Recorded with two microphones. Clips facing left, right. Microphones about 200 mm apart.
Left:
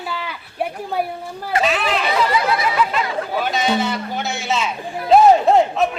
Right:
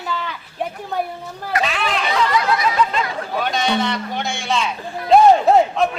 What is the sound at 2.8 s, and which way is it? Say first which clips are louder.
Music: even; 5° left (ahead or behind).